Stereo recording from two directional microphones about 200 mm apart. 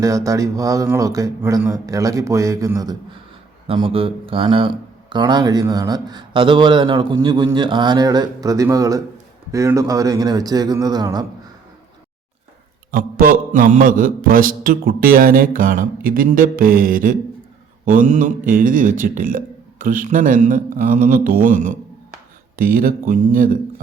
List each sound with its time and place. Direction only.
0.0 s speech: 15° right (ahead or behind)
12.9 s mantra: 45° right (ahead or behind)
19.8 s speech: 45° right (ahead or behind)
22.5 s mantra: 45° right (ahead or behind)